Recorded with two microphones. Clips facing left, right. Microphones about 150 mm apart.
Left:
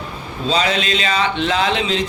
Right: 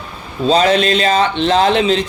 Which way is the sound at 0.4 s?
55° right (ahead or behind).